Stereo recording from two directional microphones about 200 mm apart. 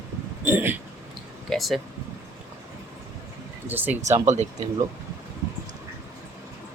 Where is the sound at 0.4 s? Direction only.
10° right (ahead or behind).